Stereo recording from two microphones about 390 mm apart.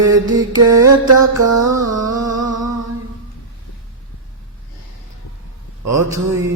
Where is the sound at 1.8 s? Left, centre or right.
Right.